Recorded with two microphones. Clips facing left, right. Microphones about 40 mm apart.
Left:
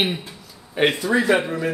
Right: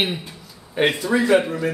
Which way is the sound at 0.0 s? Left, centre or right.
Centre.